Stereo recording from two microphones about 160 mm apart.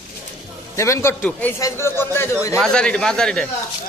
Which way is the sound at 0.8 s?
15° left (ahead or behind).